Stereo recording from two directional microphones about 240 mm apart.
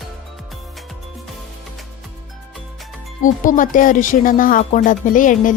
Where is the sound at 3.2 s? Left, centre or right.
Left.